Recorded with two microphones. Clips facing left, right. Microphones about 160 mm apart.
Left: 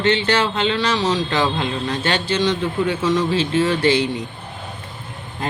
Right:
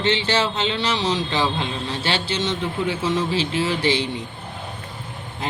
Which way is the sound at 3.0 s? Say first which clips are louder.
Left 3 dB; 65° left (ahead or behind).